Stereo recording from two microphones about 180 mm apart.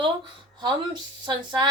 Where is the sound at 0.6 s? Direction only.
25° right (ahead or behind).